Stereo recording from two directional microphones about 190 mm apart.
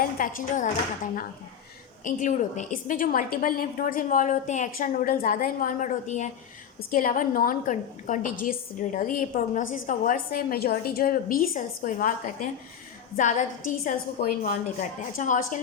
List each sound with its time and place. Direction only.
0.0 s a woman's voice: 45° left (ahead or behind)
2.0 s a woman's voice: 45° left (ahead or behind)